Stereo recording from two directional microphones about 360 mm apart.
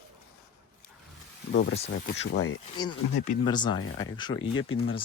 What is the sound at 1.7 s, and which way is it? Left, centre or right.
Speech, left.